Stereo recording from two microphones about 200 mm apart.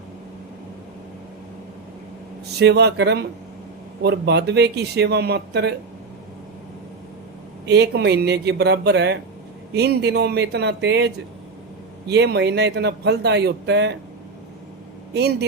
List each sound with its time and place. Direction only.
2.5 s a man's voice: 55° right (ahead or behind)
7.6 s a man's voice: 55° right (ahead or behind)
15.1 s a man's voice: 55° right (ahead or behind)